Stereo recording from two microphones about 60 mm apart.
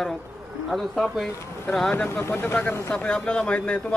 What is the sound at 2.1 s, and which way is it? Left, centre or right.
Speech, left.